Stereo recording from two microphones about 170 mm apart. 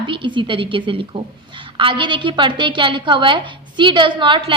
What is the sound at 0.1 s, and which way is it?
A woman's voice, 30° right (ahead or behind).